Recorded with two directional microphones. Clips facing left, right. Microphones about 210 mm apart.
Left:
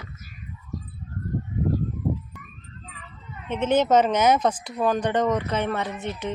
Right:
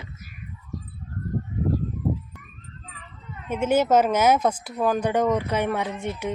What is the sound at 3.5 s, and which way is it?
Speech, 10° right (ahead or behind).